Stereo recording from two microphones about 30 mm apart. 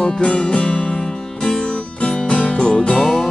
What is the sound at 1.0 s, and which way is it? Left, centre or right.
Music, left.